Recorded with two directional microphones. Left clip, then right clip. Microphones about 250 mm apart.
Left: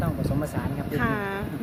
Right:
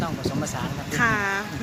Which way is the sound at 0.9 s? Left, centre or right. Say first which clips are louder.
Right 6 dB; centre.